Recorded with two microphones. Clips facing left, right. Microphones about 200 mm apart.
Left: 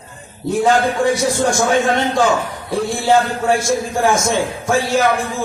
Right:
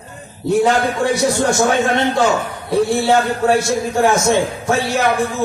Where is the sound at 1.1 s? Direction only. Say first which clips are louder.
Right 1 dB; 65° right (ahead or behind).